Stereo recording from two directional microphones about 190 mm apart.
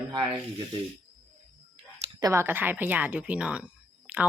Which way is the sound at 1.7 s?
20° right (ahead or behind).